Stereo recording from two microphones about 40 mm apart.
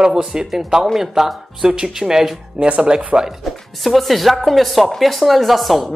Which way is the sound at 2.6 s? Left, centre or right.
Right.